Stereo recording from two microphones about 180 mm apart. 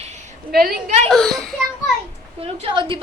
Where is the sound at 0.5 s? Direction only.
55° right (ahead or behind).